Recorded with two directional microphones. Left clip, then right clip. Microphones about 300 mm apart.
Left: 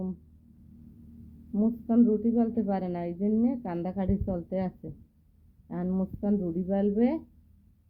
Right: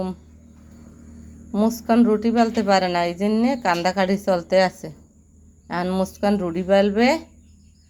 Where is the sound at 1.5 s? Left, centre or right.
Centre.